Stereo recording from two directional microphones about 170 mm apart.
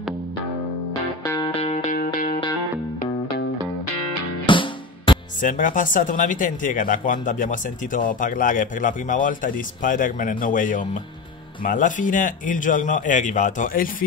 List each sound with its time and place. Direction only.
1.2 s music: 20° left (ahead or behind)
1.5 s music: 40° left (ahead or behind)
4.5 s music: 30° left (ahead or behind)
5.4 s speech: 50° left (ahead or behind)